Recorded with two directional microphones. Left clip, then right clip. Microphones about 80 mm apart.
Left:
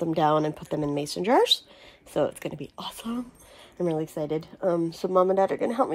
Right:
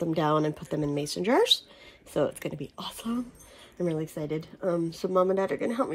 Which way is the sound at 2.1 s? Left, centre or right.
Left.